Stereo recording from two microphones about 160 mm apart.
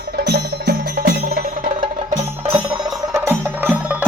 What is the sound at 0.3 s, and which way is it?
Music, 90° right.